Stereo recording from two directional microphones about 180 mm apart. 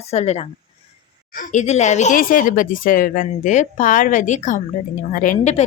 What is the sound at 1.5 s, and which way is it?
A woman's voice, 40° left (ahead or behind).